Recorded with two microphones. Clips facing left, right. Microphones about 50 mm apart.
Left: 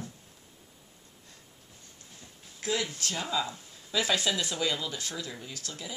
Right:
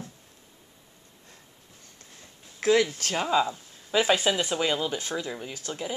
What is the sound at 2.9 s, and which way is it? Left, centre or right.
Speech, right.